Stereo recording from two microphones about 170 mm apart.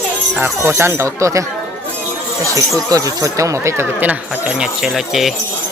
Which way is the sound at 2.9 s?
20° right (ahead or behind).